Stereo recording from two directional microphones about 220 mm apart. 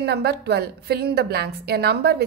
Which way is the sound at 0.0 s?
50° right (ahead or behind).